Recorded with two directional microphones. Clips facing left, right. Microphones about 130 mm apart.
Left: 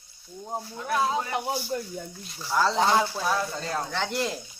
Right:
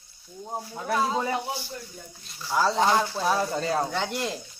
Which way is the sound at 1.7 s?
75° left (ahead or behind).